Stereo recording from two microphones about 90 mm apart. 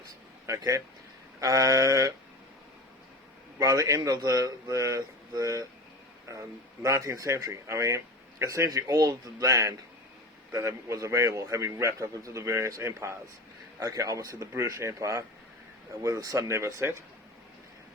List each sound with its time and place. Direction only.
0.4 s speech: 35° right (ahead or behind)
3.6 s speech: 40° right (ahead or behind)